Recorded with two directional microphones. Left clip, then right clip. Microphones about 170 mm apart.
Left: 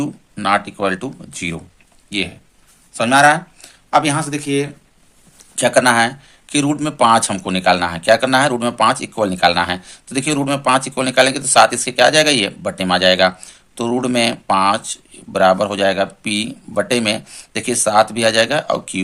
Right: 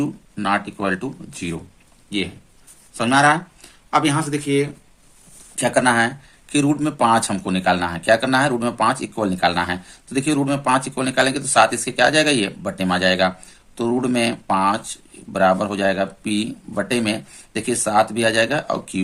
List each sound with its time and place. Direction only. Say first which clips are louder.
0.0 s speech: left 3 dB; 20° left (ahead or behind)